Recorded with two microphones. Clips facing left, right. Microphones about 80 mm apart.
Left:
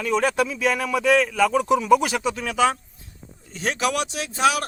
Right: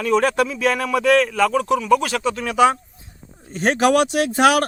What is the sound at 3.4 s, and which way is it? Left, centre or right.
Speech, right.